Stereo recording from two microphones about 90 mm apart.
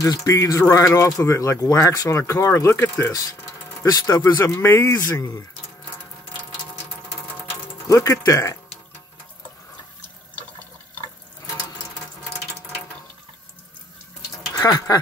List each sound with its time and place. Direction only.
0.0 s speech: 35° left (ahead or behind)
7.9 s speech: 35° left (ahead or behind)
14.5 s speech: 40° left (ahead or behind)